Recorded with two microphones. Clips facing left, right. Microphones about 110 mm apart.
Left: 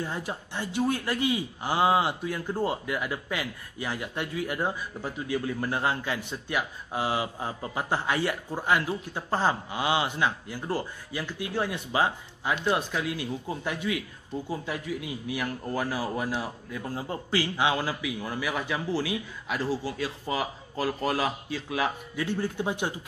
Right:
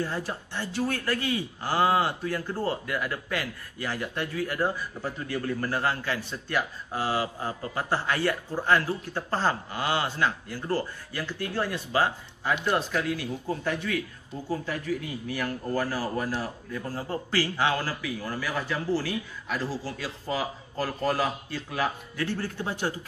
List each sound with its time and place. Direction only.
0.0 s speech: 15° left (ahead or behind)